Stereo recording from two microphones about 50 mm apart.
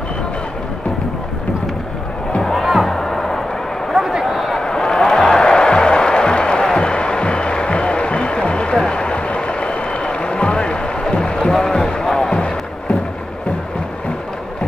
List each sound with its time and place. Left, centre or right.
2.4 s music: centre
3.9 s a sound: centre
5.4 s music: centre
8.8 s a sound: centre
11.5 s music: centre
12.4 s music: left